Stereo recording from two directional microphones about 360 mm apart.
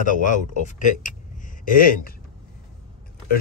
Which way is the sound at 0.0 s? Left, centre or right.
Left.